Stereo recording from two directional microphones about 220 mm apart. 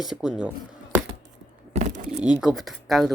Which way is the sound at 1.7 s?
30° right (ahead or behind).